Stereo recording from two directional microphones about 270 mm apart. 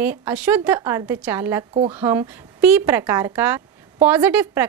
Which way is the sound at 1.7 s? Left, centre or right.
Right.